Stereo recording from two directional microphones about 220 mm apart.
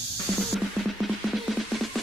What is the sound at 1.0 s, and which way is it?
Music, centre (ahead or behind).